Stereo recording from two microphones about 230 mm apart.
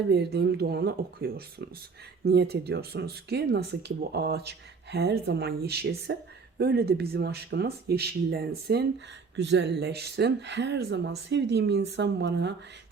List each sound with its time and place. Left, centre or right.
0.1 s speech: right